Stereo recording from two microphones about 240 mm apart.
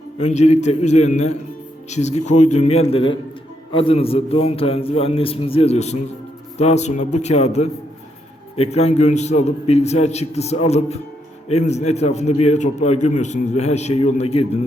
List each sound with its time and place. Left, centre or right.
0.2 s a man's voice: left